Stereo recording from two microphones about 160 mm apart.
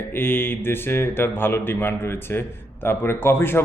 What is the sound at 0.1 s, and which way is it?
Speech, 15° left (ahead or behind).